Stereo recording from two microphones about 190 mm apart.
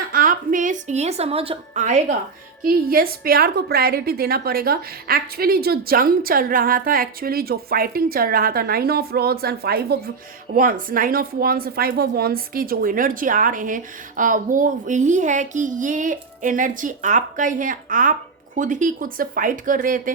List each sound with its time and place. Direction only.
0.1 s a woman's voice: 45° right (ahead or behind)
2.6 s speech: 50° right (ahead or behind)